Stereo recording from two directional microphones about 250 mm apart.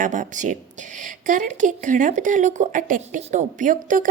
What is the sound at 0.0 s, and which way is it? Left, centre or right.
A woman's voice, right.